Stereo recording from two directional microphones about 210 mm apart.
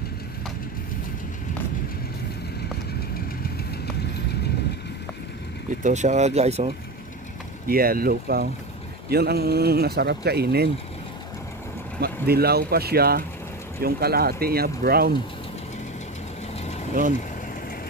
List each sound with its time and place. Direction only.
5.9 s speech: 35° right (ahead or behind)
7.6 s speech: 45° right (ahead or behind)
12.0 s speech: 50° right (ahead or behind)